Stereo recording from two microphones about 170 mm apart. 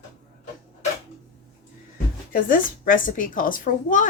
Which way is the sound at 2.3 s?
55° left (ahead or behind).